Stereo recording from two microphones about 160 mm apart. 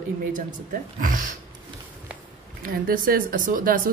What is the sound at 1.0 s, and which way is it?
Speech, 55° right (ahead or behind).